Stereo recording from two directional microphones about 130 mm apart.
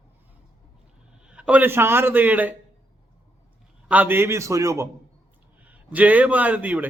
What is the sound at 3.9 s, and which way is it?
Speech, 15° right (ahead or behind).